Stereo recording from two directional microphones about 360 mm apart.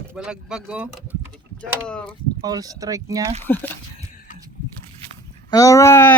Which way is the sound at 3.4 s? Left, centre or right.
Centre.